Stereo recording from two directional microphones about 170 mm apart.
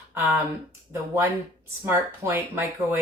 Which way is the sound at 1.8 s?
15° right (ahead or behind).